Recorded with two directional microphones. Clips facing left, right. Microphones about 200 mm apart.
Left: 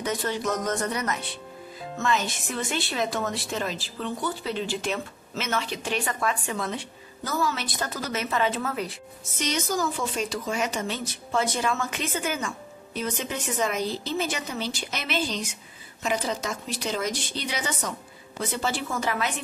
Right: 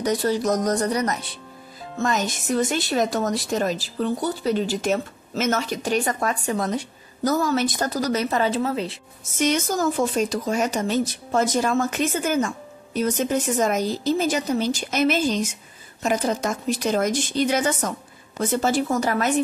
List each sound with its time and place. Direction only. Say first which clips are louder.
0.0 s speech: right 6 dB; 35° right (ahead or behind)
9.4 s speech: right 6 dB; 50° right (ahead or behind)